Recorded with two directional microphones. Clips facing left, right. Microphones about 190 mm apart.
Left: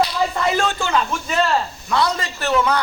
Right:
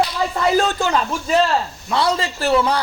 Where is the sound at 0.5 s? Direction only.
35° right (ahead or behind).